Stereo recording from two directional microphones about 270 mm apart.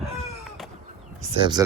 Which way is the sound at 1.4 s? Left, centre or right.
Centre.